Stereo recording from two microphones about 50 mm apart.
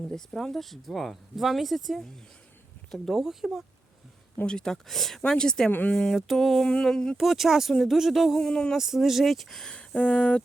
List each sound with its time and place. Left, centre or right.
0.3 s speech: centre
4.4 s speech: centre
5.9 s a sound: centre
6.1 s speech: centre
7.2 s speech: centre
8.4 s speech: centre
8.7 s speech: centre
9.7 s speech: left